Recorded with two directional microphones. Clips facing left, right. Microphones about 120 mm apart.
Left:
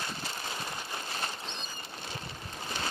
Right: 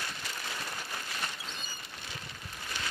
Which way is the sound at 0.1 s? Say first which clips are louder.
Left 2 dB; 30° left (ahead or behind).